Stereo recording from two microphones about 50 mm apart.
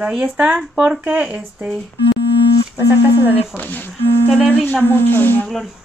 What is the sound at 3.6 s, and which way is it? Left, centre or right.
A woman's voice, left.